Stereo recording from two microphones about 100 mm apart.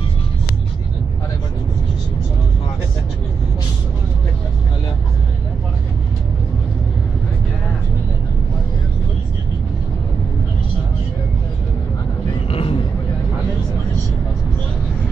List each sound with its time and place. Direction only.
12.4 s vehicle: 70° left (ahead or behind)